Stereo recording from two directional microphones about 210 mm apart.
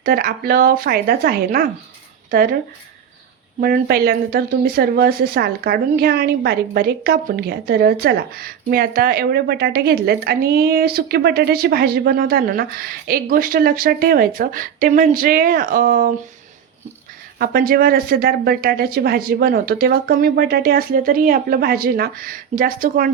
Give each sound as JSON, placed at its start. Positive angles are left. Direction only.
{"t": 0.0, "sound": "speech", "side_deg": -45}
{"t": 3.6, "sound": "speech", "side_deg": -45}
{"t": 17.3, "sound": "speech", "side_deg": -45}